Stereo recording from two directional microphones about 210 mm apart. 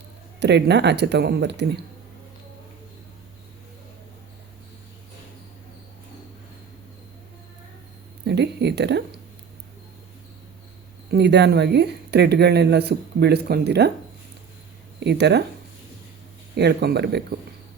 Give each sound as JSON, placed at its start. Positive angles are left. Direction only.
{"t": 0.3, "sound": "speech", "side_deg": -55}
{"t": 8.2, "sound": "a sound", "side_deg": -55}
{"t": 11.1, "sound": "speech", "side_deg": -55}
{"t": 15.0, "sound": "speech", "side_deg": -55}
{"t": 16.6, "sound": "speech", "side_deg": -50}